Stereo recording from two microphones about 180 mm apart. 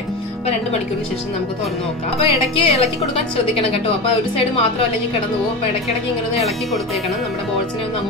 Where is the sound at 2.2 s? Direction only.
30° left (ahead or behind).